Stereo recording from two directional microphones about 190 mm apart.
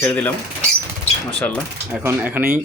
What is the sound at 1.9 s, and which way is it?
Speech, 10° right (ahead or behind).